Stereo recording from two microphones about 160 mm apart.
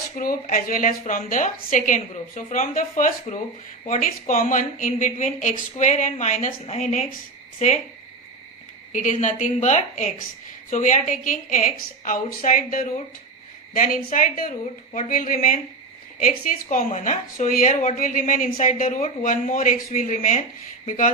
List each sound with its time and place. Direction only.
0.2 s a woman's voice: 65° left (ahead or behind)
8.9 s a woman's voice: 50° left (ahead or behind)
18.9 s speech: 40° left (ahead or behind)
19.3 s speech: 55° left (ahead or behind)